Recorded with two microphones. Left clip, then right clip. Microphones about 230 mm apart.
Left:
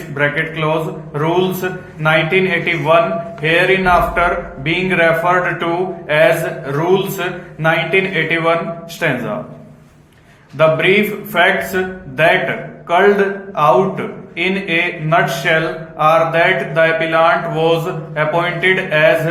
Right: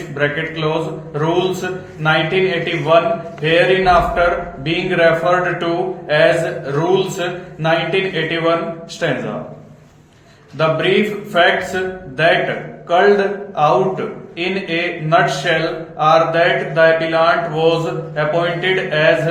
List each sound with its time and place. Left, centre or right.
0.2 s speech: left
10.6 s speech: left